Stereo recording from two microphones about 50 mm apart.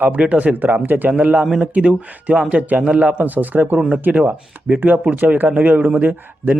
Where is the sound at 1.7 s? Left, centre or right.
Right.